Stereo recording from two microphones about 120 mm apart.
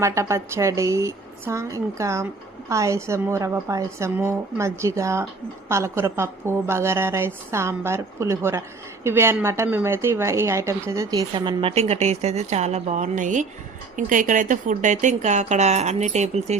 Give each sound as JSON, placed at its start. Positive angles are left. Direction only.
{"t": 0.0, "sound": "a woman's voice", "side_deg": -25}
{"t": 11.7, "sound": "speech", "side_deg": -60}